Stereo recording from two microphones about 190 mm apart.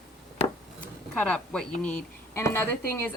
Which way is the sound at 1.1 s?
5° left (ahead or behind).